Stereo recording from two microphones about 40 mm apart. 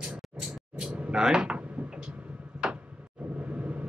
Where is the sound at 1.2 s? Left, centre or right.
Centre.